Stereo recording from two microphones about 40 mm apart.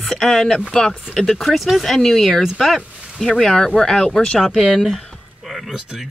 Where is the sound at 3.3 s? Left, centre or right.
Centre.